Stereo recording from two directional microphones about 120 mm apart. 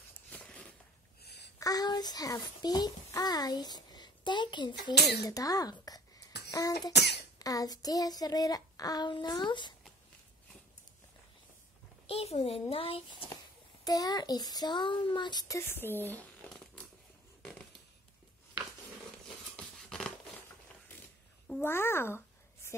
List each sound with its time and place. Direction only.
0.3 s a sound: 10° left (ahead or behind)
1.6 s a child's voice: 30° left (ahead or behind)
7.3 s child singing: 30° left (ahead or behind)
12.1 s a child's voice: 55° left (ahead or behind)
13.8 s child singing: 30° left (ahead or behind)
15.4 s speech: 20° left (ahead or behind)
19.5 s a sound: 5° left (ahead or behind)
21.5 s speech: 20° left (ahead or behind)